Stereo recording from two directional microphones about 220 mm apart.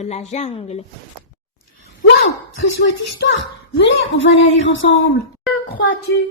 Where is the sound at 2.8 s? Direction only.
55° left (ahead or behind).